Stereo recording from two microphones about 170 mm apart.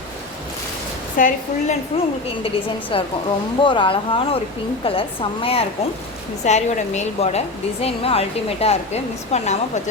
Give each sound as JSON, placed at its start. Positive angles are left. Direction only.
{"t": 1.1, "sound": "a woman's voice", "side_deg": 45}
{"t": 2.9, "sound": "speech", "side_deg": 30}